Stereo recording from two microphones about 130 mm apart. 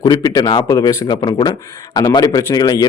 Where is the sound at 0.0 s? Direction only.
30° left (ahead or behind).